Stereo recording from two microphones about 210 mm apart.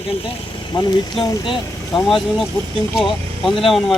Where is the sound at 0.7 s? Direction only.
20° left (ahead or behind).